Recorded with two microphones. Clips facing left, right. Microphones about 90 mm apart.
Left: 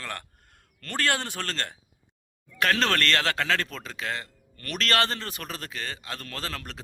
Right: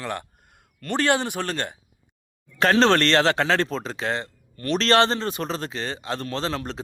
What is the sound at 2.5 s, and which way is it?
Speech, 30° right (ahead or behind).